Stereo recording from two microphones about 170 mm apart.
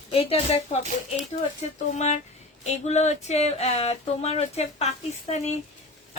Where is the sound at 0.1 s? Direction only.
35° left (ahead or behind).